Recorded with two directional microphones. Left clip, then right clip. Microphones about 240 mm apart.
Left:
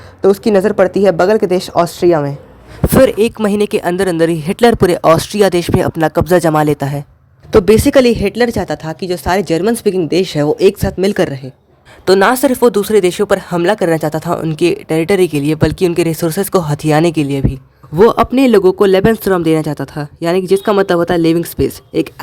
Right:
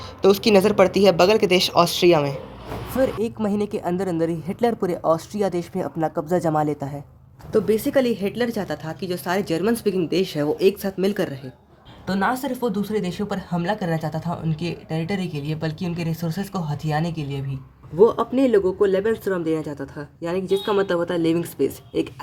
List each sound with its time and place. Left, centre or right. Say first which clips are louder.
0.2 s speech: left 6 dB; left